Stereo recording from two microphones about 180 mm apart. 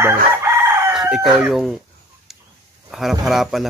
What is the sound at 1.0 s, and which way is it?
Speech, 5° right (ahead or behind).